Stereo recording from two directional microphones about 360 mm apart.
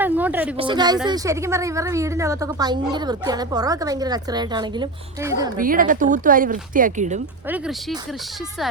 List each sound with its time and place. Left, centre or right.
0.0 s a sound: centre
0.5 s a woman's voice: centre
5.5 s speech: right